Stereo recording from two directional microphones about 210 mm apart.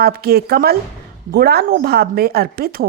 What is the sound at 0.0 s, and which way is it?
A woman's voice, 45° right (ahead or behind).